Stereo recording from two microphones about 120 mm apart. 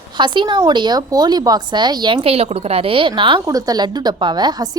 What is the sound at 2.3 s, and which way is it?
A woman's voice, 55° right (ahead or behind).